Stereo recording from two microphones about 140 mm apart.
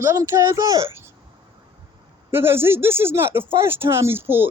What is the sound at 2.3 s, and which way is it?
Speech, 15° right (ahead or behind).